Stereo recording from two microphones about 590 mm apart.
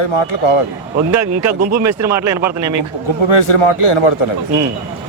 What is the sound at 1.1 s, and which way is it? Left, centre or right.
Speech, right.